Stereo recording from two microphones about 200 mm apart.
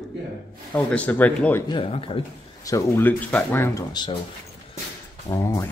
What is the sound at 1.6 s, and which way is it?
Speech, 25° left (ahead or behind).